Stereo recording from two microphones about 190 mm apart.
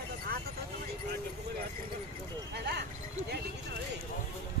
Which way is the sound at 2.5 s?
60° right (ahead or behind).